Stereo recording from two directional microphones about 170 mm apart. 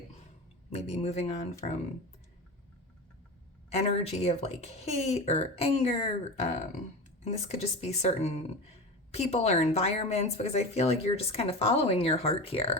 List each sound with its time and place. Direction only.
0.7 s speech: 40° left (ahead or behind)
3.7 s speech: 40° left (ahead or behind)